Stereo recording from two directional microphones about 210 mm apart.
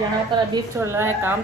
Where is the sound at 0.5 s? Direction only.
15° right (ahead or behind).